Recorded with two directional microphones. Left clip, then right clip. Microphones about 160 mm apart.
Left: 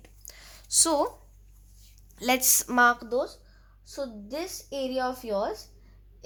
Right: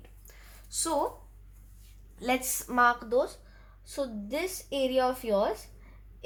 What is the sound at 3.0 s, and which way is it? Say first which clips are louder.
Speech: right 1 dB; 25° left (ahead or behind).